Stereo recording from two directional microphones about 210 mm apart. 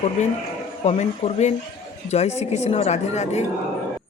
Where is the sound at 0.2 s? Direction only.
35° left (ahead or behind).